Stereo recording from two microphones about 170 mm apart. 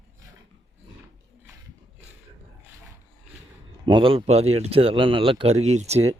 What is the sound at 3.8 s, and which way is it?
Speech, 30° right (ahead or behind).